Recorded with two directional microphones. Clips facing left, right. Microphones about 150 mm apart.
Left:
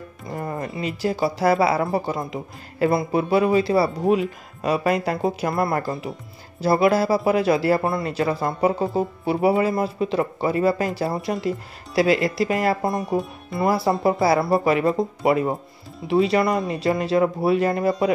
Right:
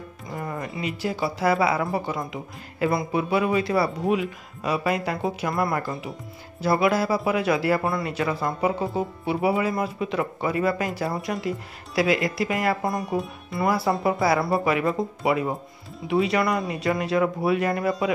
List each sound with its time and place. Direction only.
0.4 s music: 35° left (ahead or behind)
0.7 s speech: 35° left (ahead or behind)
13.1 s speech: centre (ahead or behind)
13.6 s speech: 30° left (ahead or behind)